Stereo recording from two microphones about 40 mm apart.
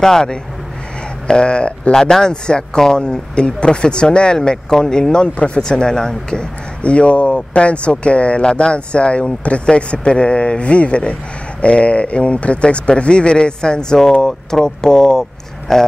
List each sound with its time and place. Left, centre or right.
0.0 s speech: centre
1.2 s speech: left
2.0 s speech: centre
6.8 s speech: left; by 15.8 s centre